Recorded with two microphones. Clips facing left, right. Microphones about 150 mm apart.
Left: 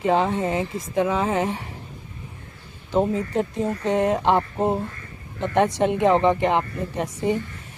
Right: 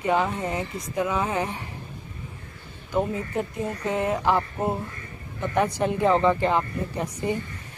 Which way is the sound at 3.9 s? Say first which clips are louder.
Left 4 dB; 25° left (ahead or behind).